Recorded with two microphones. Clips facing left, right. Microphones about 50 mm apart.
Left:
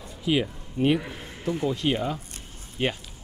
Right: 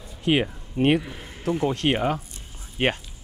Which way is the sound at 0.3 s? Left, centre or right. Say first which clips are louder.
Right 3 dB; right.